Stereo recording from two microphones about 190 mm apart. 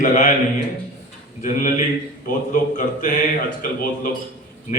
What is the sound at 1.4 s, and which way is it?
A man's voice, 40° left (ahead or behind).